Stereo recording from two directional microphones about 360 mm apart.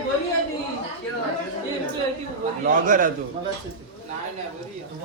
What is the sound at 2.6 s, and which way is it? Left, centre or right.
Speech, right.